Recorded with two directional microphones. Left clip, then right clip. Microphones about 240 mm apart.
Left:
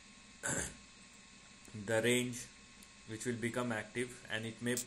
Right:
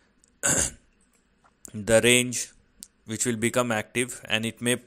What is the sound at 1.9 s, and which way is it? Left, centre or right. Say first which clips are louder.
Speech: right 14 dB; right.